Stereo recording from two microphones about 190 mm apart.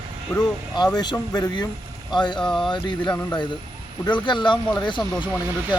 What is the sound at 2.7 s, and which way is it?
Speech, 25° left (ahead or behind).